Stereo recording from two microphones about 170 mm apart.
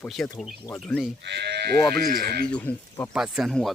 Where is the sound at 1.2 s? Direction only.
80° right; by 2.4 s 60° right (ahead or behind).